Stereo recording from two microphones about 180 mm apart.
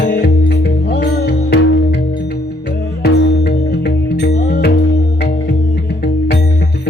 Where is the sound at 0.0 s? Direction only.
65° left (ahead or behind).